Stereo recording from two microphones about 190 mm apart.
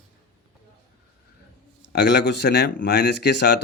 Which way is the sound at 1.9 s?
65° left (ahead or behind).